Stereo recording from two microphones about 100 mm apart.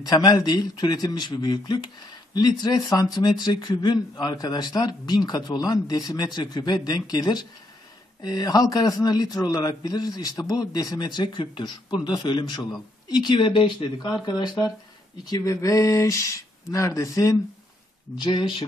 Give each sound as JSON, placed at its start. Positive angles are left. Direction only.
{"t": 0.0, "sound": "a man's voice", "side_deg": 40}
{"t": 15.2, "sound": "a sound", "side_deg": 35}
{"t": 18.1, "sound": "a man's voice", "side_deg": 50}